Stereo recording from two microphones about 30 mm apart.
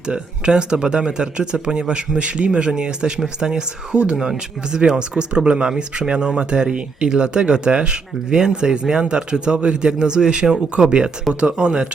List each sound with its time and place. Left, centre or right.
0.1 s a man's voice: right
3.9 s a man's voice: right